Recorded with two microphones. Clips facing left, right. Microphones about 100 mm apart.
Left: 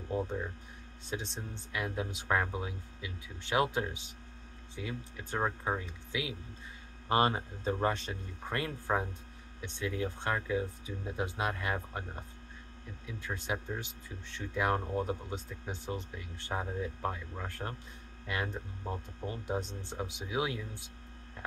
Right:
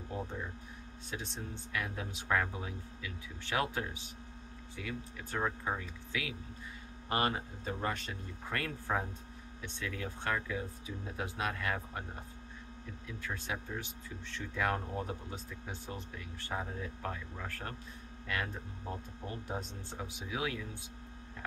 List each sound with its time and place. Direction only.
1.1 s speech: 20° left (ahead or behind)
13.0 s speech: 15° left (ahead or behind)